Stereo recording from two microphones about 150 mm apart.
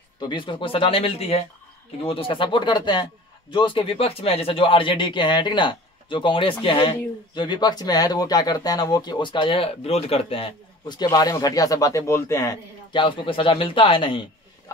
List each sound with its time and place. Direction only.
0.2 s a man's voice: 30° left (ahead or behind)
12.9 s a man's voice: 35° left (ahead or behind)